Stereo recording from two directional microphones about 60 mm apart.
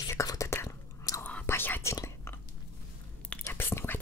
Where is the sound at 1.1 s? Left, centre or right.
Left.